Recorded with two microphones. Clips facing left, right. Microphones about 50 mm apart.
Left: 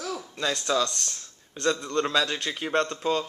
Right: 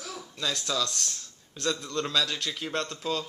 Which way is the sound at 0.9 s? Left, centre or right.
Centre.